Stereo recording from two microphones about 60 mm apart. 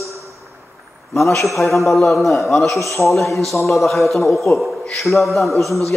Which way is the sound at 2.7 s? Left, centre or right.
Left.